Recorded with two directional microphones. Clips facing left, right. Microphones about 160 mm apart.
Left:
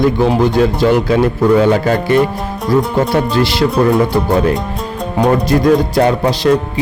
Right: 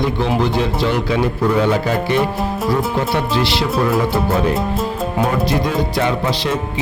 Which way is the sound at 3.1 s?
45° left (ahead or behind).